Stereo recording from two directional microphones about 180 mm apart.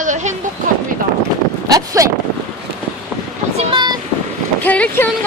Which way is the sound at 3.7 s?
25° right (ahead or behind).